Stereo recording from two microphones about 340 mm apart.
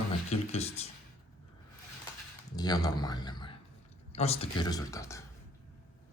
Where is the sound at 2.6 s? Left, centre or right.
Centre.